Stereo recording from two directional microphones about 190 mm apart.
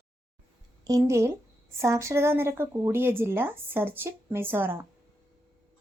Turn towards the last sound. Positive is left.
turn(degrees=-10)  # may be behind; listen again after turning